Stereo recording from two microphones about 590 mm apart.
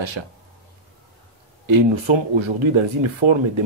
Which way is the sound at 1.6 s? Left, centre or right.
Right.